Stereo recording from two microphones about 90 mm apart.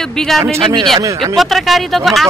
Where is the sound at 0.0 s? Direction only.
5° left (ahead or behind).